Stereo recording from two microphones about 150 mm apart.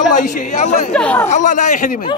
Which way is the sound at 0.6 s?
50° left (ahead or behind).